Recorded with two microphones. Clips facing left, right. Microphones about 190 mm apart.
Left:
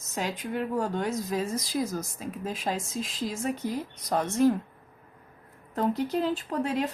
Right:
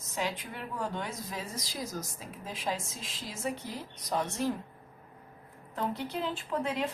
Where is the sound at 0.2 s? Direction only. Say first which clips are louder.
Left 5 dB; 45° left (ahead or behind).